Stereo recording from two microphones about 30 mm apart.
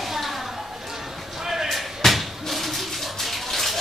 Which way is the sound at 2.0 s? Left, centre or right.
Centre.